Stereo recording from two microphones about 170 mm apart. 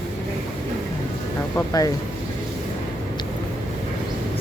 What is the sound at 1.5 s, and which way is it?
Speech, 20° left (ahead or behind).